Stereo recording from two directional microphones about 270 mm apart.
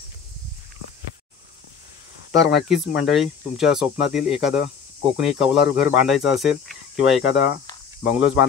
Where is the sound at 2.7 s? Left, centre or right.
Centre.